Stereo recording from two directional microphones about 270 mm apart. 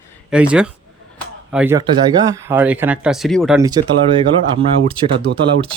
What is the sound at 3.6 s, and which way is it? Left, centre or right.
Speech, centre.